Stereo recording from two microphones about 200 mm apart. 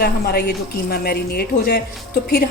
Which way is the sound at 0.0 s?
50° left (ahead or behind).